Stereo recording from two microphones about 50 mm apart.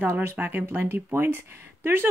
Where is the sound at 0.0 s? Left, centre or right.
Right.